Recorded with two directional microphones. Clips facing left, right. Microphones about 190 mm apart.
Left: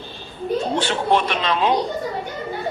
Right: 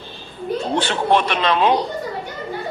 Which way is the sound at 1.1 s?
65° right (ahead or behind).